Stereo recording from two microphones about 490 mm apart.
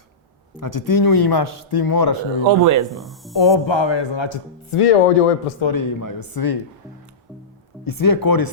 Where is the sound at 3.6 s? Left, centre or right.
Left.